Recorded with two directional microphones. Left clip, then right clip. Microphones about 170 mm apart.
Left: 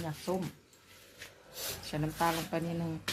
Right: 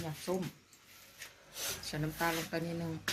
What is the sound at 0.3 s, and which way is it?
Speech, 30° left (ahead or behind).